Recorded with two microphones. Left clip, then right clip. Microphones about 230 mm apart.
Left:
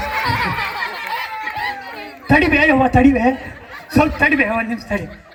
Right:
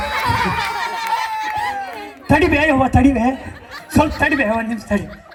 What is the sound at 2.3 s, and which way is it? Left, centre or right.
A man's voice, right.